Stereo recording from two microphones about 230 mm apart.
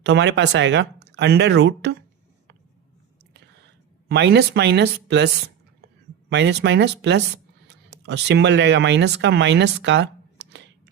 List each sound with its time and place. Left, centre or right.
0.0 s speech: right
4.1 s speech: right